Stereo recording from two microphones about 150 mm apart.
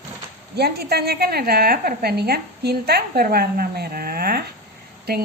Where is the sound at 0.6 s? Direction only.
90° right.